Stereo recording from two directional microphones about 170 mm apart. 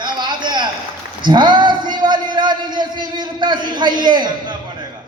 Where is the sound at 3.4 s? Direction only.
25° right (ahead or behind).